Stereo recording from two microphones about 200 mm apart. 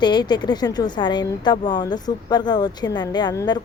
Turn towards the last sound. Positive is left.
turn(degrees=20)  # may be behind; listen again after turning